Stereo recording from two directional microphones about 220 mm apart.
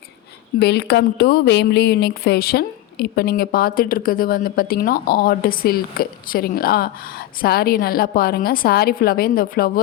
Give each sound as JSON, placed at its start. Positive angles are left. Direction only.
{"t": 0.6, "sound": "speech", "side_deg": 45}